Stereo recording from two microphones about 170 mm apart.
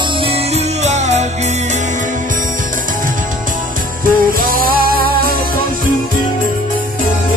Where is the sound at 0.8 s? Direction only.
40° right (ahead or behind).